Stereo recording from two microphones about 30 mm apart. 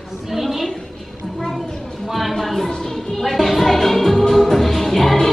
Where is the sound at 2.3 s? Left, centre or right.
Centre.